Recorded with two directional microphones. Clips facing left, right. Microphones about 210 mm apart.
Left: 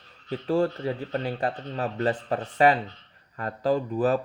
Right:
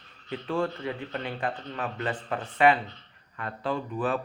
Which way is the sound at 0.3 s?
40° left (ahead or behind).